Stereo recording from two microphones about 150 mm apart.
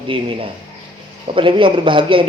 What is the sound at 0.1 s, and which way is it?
A man's voice, 35° right (ahead or behind).